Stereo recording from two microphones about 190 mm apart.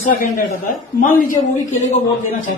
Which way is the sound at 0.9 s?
40° left (ahead or behind).